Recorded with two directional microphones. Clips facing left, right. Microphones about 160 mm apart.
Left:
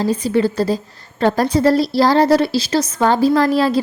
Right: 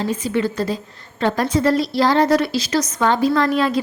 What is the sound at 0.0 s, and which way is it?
A woman's voice, 35° left (ahead or behind).